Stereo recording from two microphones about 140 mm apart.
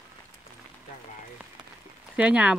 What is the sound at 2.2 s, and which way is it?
Speech, 10° right (ahead or behind).